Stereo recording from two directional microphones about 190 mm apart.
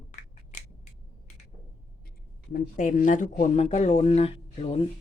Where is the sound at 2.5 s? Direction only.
45° left (ahead or behind).